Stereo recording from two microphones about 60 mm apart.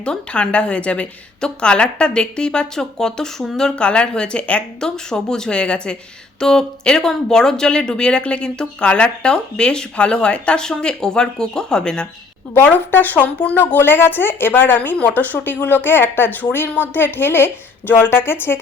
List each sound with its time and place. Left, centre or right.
0.0 s a woman's voice: centre
12.6 s speech: left